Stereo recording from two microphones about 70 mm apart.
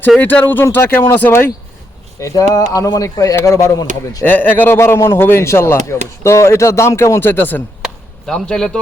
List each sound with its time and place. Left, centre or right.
0.2 s speech: left
2.2 s speech: left
4.2 s speech: left
7.3 s speech: left
8.3 s a man's voice: centre